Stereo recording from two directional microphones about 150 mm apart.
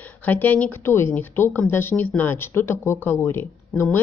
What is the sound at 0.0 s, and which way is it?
Speech, 10° left (ahead or behind).